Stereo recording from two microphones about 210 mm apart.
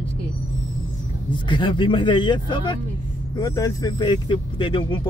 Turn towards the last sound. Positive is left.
turn(degrees=25)  # may be behind; listen again after turning